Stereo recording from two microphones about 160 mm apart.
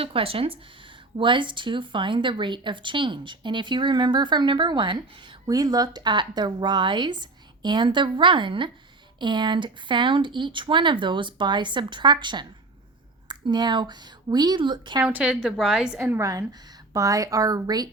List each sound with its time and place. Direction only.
0.0 s speech: 35° right (ahead or behind)
15.0 s a woman's voice: 5° right (ahead or behind)
16.0 s a woman's voice: 15° right (ahead or behind)